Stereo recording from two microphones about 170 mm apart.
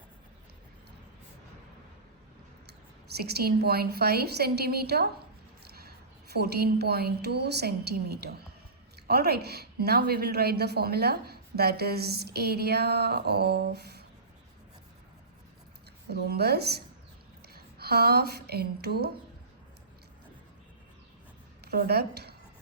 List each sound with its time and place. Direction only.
3.2 s a woman's voice: 70° right (ahead or behind)
6.3 s a woman's voice: 70° right (ahead or behind)
16.0 s a woman's voice: 70° right (ahead or behind)
21.6 s speech: 70° right (ahead or behind)